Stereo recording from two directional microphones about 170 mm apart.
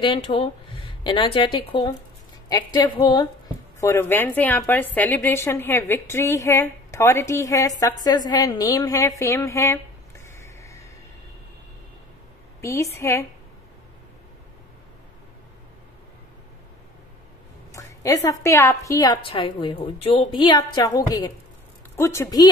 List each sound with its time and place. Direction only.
0.0 s a woman's voice: 30° left (ahead or behind)
12.6 s a woman's voice: 15° left (ahead or behind)
17.7 s a woman's voice: 20° left (ahead or behind)